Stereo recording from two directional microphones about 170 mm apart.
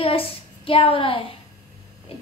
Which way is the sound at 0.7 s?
30° left (ahead or behind).